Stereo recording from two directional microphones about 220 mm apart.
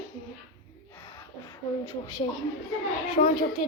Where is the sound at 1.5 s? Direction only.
15° left (ahead or behind).